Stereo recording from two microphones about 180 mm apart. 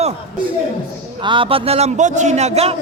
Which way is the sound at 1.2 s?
30° right (ahead or behind).